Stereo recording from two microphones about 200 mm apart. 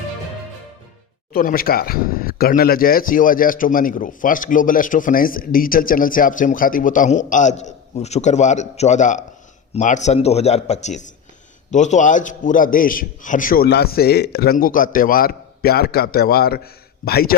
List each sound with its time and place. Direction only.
1.3 s a man's voice: 45° left (ahead or behind)